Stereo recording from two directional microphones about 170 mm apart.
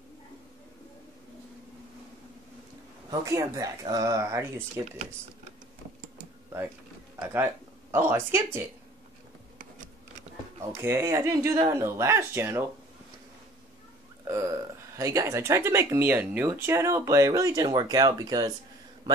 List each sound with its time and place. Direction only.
3.1 s speech: 20° right (ahead or behind)
7.2 s speech: 10° right (ahead or behind)
10.7 s speech: 15° right (ahead or behind)
14.2 s speech: 20° right (ahead or behind)